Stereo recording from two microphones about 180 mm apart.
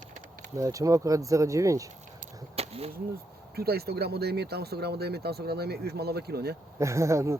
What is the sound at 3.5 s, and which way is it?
Speech, 60° right (ahead or behind).